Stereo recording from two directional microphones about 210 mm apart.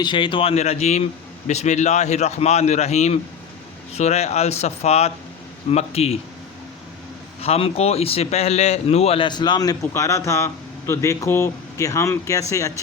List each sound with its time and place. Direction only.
0.0 s a man's voice: 25° left (ahead or behind)
7.4 s a man's voice: 30° left (ahead or behind)